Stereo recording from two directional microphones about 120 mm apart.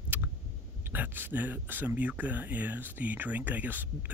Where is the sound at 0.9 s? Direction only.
15° right (ahead or behind).